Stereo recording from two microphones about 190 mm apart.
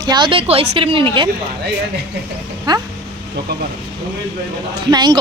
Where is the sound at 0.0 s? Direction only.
25° right (ahead or behind).